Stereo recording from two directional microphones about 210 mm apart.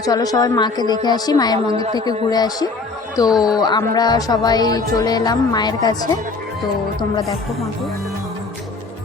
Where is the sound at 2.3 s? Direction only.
20° left (ahead or behind).